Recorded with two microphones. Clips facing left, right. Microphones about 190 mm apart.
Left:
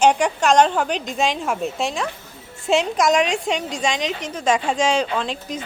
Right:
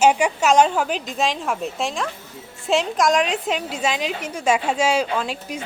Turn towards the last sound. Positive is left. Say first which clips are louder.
# even
turn(degrees=-10)  # may be behind; listen again after turning